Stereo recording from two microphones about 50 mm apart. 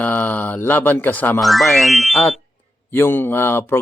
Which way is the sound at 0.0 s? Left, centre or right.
Left.